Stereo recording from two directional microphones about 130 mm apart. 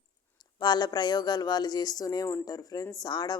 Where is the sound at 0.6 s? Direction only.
35° left (ahead or behind).